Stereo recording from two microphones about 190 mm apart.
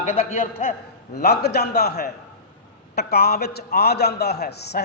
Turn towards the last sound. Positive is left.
turn(degrees=60)  # may be behind; listen again after turning